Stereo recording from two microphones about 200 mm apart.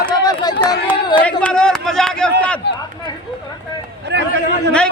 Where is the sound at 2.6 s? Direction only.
55° left (ahead or behind).